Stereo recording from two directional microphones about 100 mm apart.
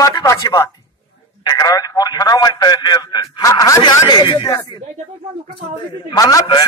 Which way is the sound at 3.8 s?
45° left (ahead or behind).